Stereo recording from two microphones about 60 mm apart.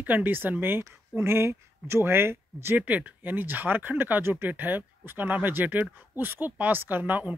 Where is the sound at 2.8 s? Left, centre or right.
Right.